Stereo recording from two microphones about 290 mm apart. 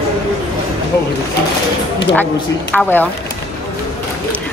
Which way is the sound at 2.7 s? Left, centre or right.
Centre.